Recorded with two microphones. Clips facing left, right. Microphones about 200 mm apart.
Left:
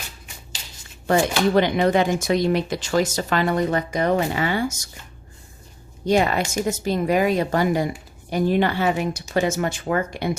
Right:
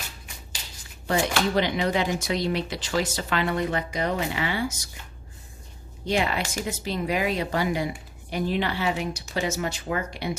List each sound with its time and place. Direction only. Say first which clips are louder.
1.5 s speech: left 8 dB; 50° left (ahead or behind)
6.1 s speech: left 6 dB; 45° left (ahead or behind)